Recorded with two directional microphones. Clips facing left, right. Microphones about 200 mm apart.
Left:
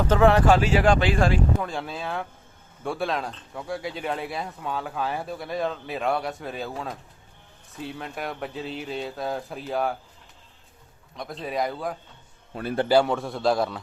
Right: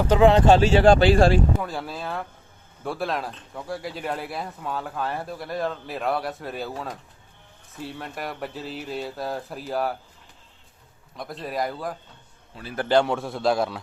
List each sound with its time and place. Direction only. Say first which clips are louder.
0.0 s speech: right 2 dB; 15° right (ahead or behind); by 1.4 s 35° right (ahead or behind)
1.6 s speech: even; 5° right (ahead or behind)
11.2 s speech: left 1 dB; centre (ahead or behind)
12.5 s speech: left 8 dB; 50° left (ahead or behind)
12.9 s speech: right 1 dB; 5° left (ahead or behind)